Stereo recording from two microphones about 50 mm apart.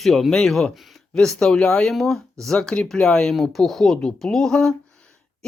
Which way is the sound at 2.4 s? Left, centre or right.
Centre.